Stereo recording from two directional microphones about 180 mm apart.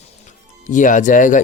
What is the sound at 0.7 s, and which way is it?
Speech, 45° left (ahead or behind).